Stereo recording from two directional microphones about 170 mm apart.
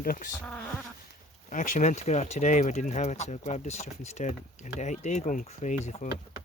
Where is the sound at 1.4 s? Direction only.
50° left (ahead or behind).